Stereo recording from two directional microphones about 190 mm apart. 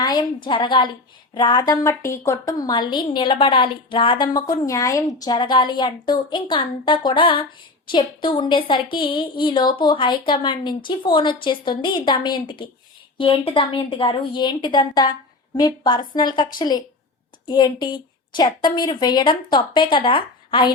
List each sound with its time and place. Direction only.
0.0 s a woman's voice: 20° left (ahead or behind)